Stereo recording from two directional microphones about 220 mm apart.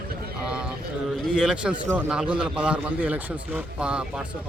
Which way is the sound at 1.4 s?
5° right (ahead or behind).